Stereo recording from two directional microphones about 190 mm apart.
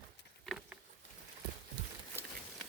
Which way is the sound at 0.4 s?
Centre (ahead or behind).